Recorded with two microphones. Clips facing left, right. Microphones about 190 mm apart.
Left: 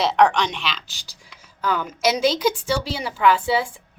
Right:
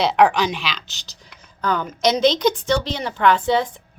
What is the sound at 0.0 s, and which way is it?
A woman's voice, centre (ahead or behind).